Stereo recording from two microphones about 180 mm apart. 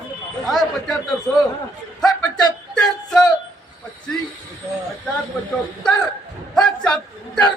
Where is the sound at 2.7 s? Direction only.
5° left (ahead or behind).